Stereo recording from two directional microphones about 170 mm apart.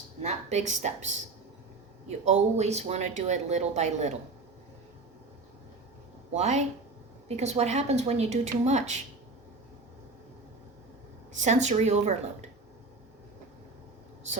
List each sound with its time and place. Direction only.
0.2 s speech: 40° right (ahead or behind)
6.3 s speech: 40° right (ahead or behind)
11.3 s speech: 45° right (ahead or behind)